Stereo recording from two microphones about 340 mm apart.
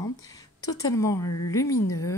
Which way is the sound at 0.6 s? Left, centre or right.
Centre.